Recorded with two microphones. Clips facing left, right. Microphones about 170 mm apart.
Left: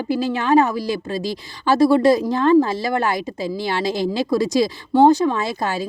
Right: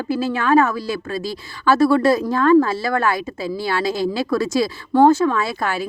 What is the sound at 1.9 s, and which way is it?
A woman's voice, 15° left (ahead or behind).